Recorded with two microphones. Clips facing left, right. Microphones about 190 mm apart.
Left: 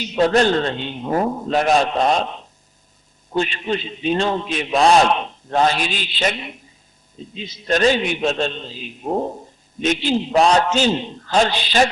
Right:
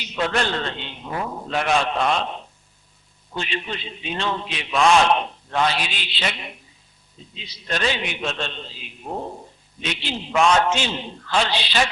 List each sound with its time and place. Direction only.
0.0 s a man's voice: 40° left (ahead or behind)
3.3 s a man's voice: 45° left (ahead or behind)
7.3 s a man's voice: 50° left (ahead or behind)